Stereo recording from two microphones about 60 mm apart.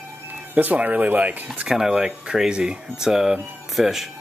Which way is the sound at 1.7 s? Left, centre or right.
Centre.